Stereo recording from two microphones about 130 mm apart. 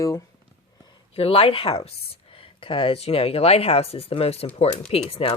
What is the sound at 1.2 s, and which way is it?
Speech, 45° left (ahead or behind).